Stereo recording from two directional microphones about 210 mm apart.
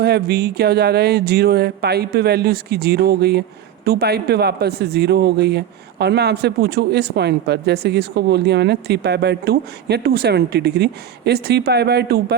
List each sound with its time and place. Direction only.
0.0 s speech: 50° right (ahead or behind)